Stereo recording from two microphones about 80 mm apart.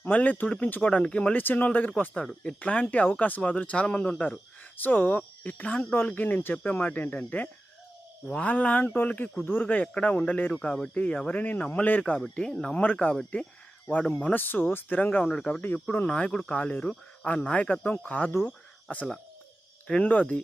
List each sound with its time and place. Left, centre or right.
0.0 s speech: left
15.6 s speech: left
16.0 s speech: centre
18.4 s cricket: centre
19.9 s speech: centre